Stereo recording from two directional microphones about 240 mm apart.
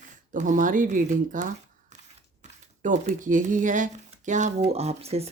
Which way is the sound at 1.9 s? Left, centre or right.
Right.